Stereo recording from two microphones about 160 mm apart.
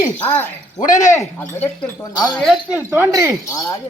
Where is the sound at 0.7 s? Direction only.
55° left (ahead or behind).